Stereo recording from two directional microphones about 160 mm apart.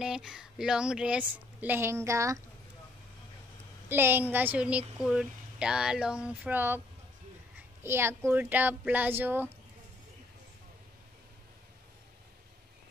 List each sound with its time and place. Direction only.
0.0 s a woman's voice: 5° right (ahead or behind); by 2.4 s 20° right (ahead or behind)
3.9 s a woman's voice: 15° right (ahead or behind)
7.8 s a woman's voice: 15° right (ahead or behind)